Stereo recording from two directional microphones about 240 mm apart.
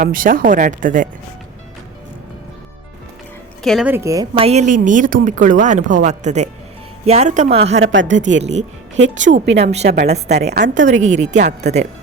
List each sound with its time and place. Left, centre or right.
0.0 s speech: right
3.6 s speech: centre; by 7.8 s right
7.9 s a woman's voice: right
9.6 s speech: right
10.5 s a woman's voice: right
10.8 s speech: right